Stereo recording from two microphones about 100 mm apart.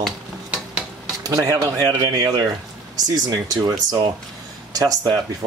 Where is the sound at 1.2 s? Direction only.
40° right (ahead or behind).